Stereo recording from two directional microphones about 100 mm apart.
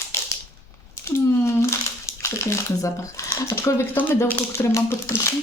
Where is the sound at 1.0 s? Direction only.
25° left (ahead or behind).